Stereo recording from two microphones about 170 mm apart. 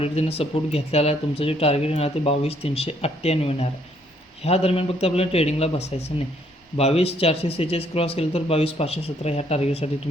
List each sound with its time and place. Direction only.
0.0 s speech: 35° left (ahead or behind)